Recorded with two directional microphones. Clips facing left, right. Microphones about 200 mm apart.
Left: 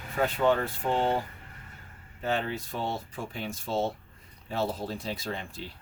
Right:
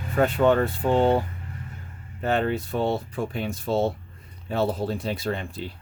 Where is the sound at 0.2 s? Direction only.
60° right (ahead or behind).